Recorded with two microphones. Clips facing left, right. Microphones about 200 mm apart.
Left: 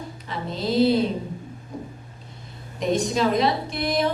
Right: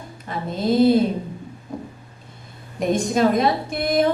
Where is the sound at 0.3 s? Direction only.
50° right (ahead or behind).